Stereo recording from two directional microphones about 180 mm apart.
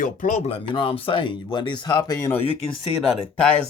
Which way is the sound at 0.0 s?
45° left (ahead or behind).